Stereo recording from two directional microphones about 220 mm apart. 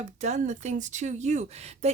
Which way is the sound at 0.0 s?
30° right (ahead or behind).